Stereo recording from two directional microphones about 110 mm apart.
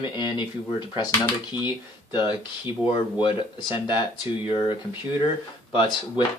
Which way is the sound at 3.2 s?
45° left (ahead or behind).